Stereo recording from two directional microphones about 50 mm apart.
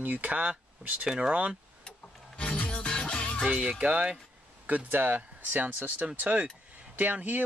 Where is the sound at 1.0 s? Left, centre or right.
Centre.